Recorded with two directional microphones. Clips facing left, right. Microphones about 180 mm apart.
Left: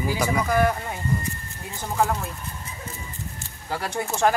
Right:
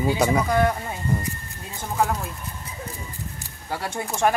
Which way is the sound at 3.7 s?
15° right (ahead or behind).